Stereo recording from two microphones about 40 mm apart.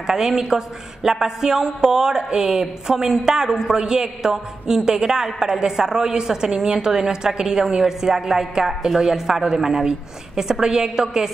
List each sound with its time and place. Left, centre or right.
0.0 s a woman's voice: centre